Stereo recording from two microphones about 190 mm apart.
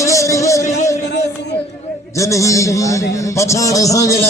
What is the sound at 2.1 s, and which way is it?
A man's voice, 15° left (ahead or behind).